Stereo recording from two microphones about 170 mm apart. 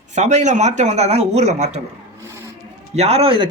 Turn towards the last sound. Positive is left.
turn(degrees=-30)  # may be behind; listen again after turning